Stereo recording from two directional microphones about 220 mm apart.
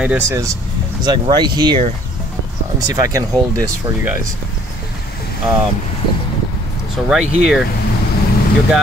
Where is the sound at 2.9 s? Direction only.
15° right (ahead or behind).